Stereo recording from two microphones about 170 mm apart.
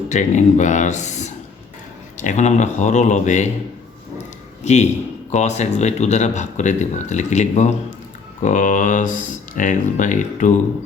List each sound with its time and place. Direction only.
0.1 s speech: 45° left (ahead or behind)
4.6 s a man's voice: 40° left (ahead or behind)